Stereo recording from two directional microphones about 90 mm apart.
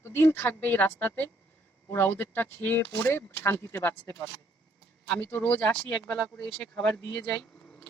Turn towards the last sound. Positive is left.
turn(degrees=10)  # may be behind; listen again after turning